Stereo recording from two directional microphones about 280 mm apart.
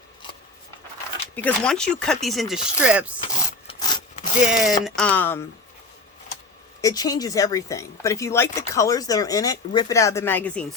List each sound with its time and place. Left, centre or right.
1.4 s speech: centre
3.2 s wood: left
3.8 s sawing: centre
4.4 s speech: centre
6.8 s speech: centre